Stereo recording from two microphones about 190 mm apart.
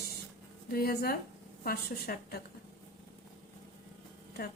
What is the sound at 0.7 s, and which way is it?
A woman's voice, 50° left (ahead or behind).